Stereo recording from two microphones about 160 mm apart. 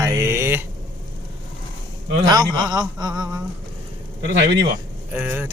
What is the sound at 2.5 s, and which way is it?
Speech, 25° right (ahead or behind).